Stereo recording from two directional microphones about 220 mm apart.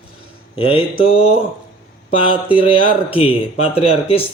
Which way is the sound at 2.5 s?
25° left (ahead or behind).